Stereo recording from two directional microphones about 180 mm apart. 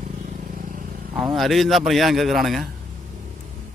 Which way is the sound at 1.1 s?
Centre (ahead or behind).